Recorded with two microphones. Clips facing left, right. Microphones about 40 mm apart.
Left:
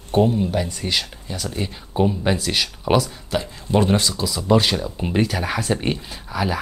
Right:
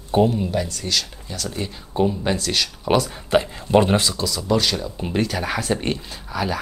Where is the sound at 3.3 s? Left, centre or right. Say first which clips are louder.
Right 6 dB; right.